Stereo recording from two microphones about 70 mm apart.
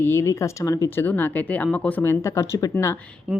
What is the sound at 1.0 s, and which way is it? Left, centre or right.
A woman's voice, left.